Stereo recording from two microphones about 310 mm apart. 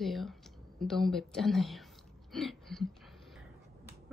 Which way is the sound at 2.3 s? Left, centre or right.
Centre.